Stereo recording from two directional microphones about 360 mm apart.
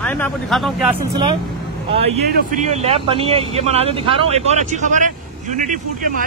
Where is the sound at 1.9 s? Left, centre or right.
Centre.